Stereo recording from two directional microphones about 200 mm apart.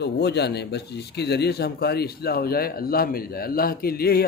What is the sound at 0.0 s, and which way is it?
Speech, 55° left (ahead or behind).